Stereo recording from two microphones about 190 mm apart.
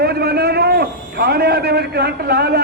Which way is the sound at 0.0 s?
55° right (ahead or behind).